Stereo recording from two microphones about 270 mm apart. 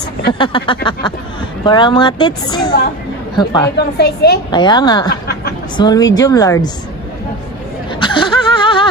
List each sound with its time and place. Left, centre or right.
0.3 s speech: centre
3.7 s speech: left
4.5 s speech: centre
8.0 s a sound: centre